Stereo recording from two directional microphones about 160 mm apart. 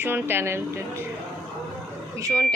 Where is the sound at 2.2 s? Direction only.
20° right (ahead or behind).